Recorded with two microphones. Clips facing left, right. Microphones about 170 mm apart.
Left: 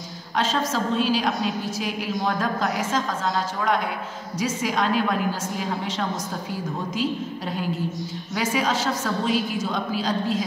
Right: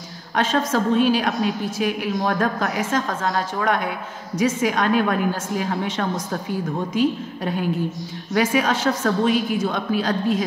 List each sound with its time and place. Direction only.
0.4 s a woman's voice: 55° right (ahead or behind)